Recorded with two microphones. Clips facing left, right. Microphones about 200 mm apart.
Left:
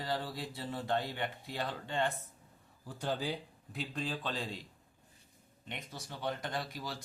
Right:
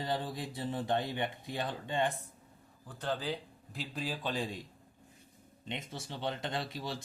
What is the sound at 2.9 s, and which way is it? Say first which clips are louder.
Speech: even; 10° left (ahead or behind).